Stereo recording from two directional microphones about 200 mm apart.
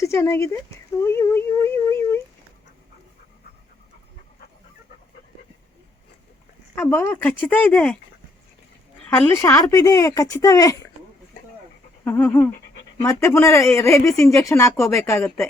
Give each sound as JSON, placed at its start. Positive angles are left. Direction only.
{"t": 0.0, "sound": "speech", "side_deg": 15}
{"t": 1.0, "sound": "a sound", "side_deg": 10}
{"t": 6.7, "sound": "speech", "side_deg": 10}
{"t": 9.0, "sound": "speech", "side_deg": 10}
{"t": 12.0, "sound": "speech", "side_deg": 10}